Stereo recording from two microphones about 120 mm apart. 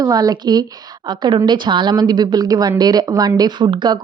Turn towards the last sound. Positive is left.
turn(degrees=-40)  # may be behind; listen again after turning